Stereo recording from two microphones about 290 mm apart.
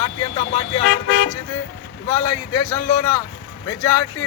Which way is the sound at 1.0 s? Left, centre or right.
Left.